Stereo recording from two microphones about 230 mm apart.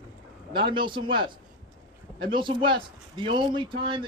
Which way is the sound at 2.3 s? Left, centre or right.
Right.